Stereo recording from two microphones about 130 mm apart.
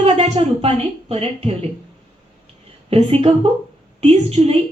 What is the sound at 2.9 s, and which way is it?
A woman's voice, 50° right (ahead or behind).